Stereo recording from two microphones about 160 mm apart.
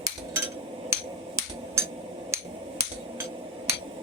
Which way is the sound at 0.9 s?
15° right (ahead or behind).